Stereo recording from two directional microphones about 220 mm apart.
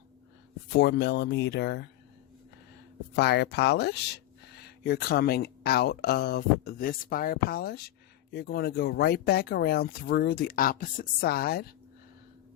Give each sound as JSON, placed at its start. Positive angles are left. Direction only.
{"t": 0.7, "sound": "speech", "side_deg": 50}
{"t": 3.2, "sound": "speech", "side_deg": 50}